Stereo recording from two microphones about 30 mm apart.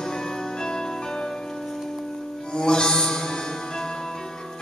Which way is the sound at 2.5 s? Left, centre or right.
Left.